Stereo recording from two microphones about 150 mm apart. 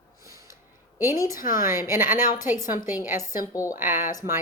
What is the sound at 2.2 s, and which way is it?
Speech, 65° left (ahead or behind).